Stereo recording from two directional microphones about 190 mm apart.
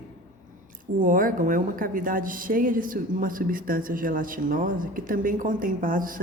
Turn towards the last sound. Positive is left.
turn(degrees=-45)  # may be behind; listen again after turning